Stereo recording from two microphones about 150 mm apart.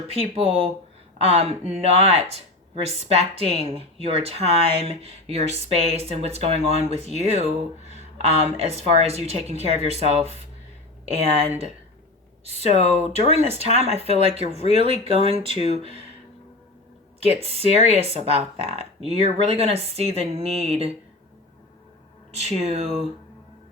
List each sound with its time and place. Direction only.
0.1 s speech: 40° right (ahead or behind)
13.0 s speech: 45° right (ahead or behind)
14.5 s speech: 45° left (ahead or behind)
15.3 s speech: 40° right (ahead or behind)
15.6 s speech: 45° left (ahead or behind)
17.2 s speech: 40° right (ahead or behind)
22.4 s speech: 45° right (ahead or behind)